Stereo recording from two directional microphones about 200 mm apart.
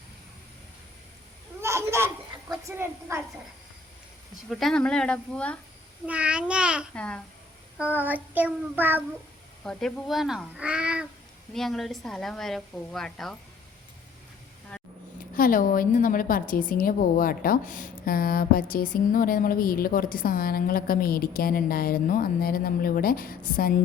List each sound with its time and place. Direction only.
1.6 s a sound: 15° right (ahead or behind)
2.5 s a woman's voice: 15° right (ahead or behind)
4.4 s a woman's voice: centre (ahead or behind)
6.1 s a woman's voice: 5° right (ahead or behind)
6.9 s a woman's voice: 5° left (ahead or behind)
7.9 s child singing: 10° right (ahead or behind)
9.6 s a woman's voice: centre (ahead or behind)
15.4 s a woman's voice: 45° left (ahead or behind)